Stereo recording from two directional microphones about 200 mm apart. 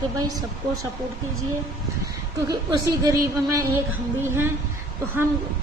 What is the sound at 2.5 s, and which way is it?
Speech, 20° right (ahead or behind).